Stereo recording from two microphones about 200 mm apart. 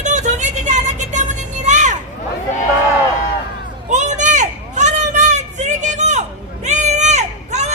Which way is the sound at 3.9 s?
40° right (ahead or behind).